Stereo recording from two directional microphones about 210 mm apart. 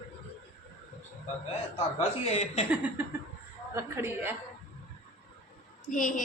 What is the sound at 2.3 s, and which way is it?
Speech, 30° left (ahead or behind).